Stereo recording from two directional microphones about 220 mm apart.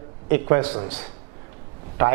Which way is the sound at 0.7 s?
30° right (ahead or behind).